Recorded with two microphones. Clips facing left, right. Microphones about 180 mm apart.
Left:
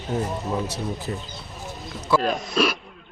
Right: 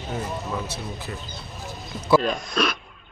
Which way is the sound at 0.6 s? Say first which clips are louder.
Left 4 dB; 40° left (ahead or behind).